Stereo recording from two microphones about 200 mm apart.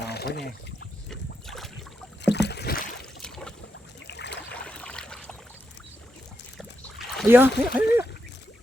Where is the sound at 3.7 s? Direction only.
60° left (ahead or behind).